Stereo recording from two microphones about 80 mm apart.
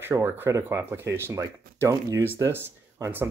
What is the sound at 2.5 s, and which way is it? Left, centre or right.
Speech, right.